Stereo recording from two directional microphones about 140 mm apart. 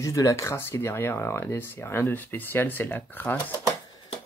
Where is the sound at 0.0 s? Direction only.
25° left (ahead or behind).